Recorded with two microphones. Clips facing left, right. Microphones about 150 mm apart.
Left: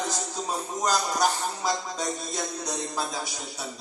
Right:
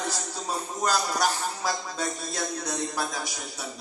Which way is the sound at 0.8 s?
20° left (ahead or behind).